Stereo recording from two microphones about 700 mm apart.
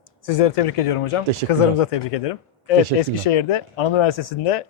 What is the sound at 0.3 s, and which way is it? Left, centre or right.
Speech, left.